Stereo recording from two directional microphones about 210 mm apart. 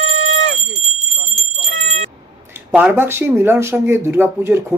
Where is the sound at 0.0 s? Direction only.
70° left (ahead or behind).